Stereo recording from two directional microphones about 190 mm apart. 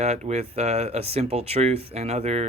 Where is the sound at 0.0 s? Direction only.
35° right (ahead or behind).